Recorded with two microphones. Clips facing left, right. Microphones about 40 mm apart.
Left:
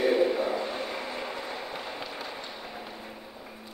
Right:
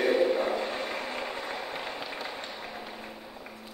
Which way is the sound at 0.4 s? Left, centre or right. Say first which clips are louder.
Even; right.